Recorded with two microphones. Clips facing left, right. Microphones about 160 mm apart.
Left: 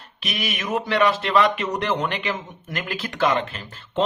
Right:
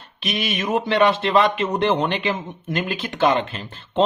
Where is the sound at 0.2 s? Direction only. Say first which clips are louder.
Right 4 dB; 25° right (ahead or behind).